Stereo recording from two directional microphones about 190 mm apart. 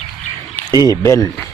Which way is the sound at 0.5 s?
20° left (ahead or behind).